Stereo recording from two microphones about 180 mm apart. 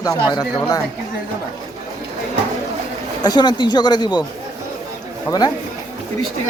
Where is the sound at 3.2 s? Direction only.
25° left (ahead or behind).